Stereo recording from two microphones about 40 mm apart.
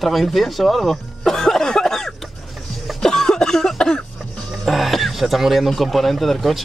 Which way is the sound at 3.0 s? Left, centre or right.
Centre.